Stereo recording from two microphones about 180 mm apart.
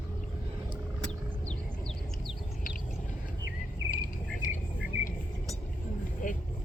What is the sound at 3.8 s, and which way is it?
Cricket, 50° left (ahead or behind).